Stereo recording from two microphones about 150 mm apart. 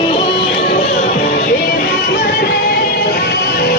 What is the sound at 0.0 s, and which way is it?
Music, 40° left (ahead or behind).